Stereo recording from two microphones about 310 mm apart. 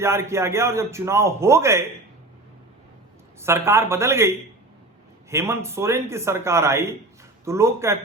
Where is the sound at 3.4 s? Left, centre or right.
Centre.